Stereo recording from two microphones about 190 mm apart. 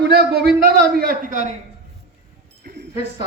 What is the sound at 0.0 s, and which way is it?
Speech, 60° right (ahead or behind).